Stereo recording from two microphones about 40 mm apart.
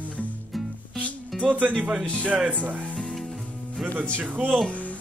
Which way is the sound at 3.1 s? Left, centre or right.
Centre.